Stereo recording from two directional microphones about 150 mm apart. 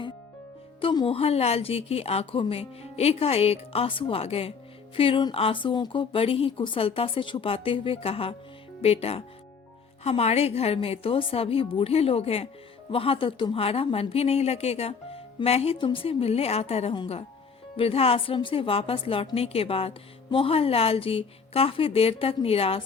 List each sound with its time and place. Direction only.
0.8 s a woman's voice: 35° left (ahead or behind)